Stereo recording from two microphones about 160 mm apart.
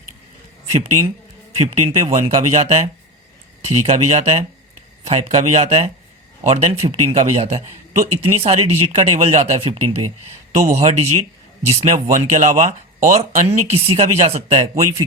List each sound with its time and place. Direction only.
0.7 s speech: 40° right (ahead or behind)